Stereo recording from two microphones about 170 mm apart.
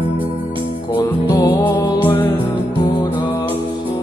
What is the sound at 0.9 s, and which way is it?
Music, 20° left (ahead or behind).